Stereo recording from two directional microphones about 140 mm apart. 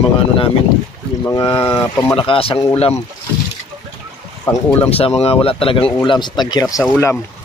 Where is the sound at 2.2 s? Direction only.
40° left (ahead or behind).